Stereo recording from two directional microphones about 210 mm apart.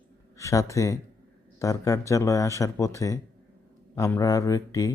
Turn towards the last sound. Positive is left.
turn(degrees=15)  # may be behind; listen again after turning